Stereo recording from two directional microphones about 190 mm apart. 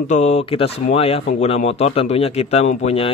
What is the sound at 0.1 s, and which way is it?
Speech, 35° left (ahead or behind).